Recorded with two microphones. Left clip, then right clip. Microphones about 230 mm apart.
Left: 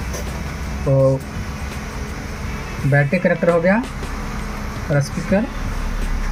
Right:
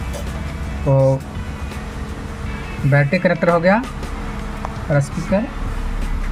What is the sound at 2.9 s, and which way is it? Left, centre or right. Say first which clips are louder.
Speech: right 1 dB; right.